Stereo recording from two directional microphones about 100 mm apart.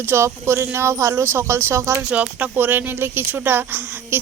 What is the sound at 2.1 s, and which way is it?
Speech, 15° right (ahead or behind).